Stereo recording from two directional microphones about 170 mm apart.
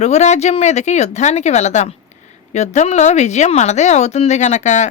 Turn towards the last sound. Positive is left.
turn(degrees=45)  # may be behind; listen again after turning